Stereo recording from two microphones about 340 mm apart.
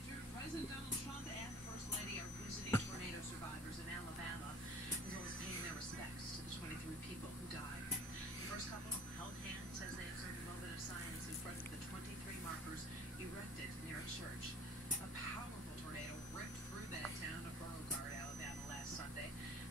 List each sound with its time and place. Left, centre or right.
2.7 s music: centre